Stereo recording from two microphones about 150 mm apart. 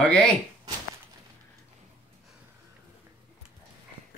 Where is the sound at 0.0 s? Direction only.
10° left (ahead or behind).